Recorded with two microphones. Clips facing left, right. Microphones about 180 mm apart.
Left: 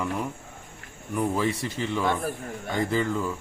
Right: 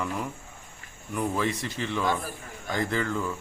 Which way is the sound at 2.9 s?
5° left (ahead or behind).